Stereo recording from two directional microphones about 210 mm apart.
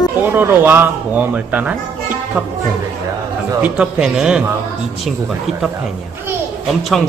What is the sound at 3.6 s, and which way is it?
Speech, 5° right (ahead or behind).